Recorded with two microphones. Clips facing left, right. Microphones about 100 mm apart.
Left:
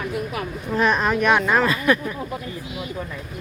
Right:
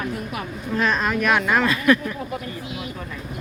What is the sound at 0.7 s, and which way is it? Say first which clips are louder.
Speech: left 2 dB; 15° left (ahead or behind).